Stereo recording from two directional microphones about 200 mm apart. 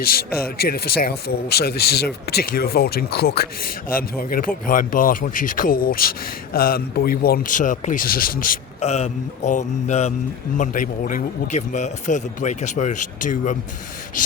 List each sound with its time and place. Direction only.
0.0 s speech: 50° left (ahead or behind)